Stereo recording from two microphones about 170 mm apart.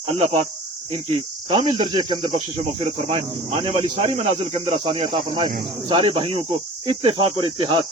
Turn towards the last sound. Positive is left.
turn(degrees=-30)  # may be behind; listen again after turning